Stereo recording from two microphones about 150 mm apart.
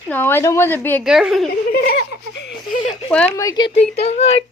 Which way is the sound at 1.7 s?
90° left.